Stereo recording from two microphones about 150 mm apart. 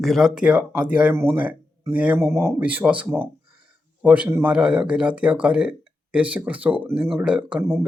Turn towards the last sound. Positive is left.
turn(degrees=-15)  # may be behind; listen again after turning